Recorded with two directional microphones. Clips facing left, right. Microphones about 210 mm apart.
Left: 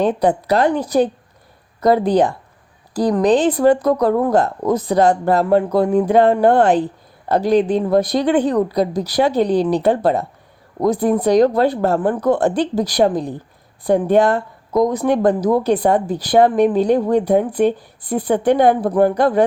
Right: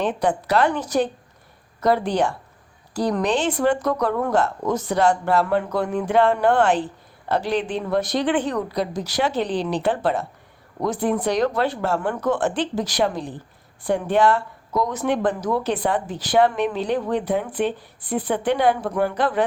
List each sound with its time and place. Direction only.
0.0 s speech: 35° left (ahead or behind)
1.8 s speech: 35° left (ahead or behind)